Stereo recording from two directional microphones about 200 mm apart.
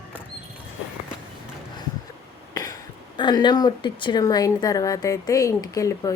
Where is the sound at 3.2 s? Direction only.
20° left (ahead or behind).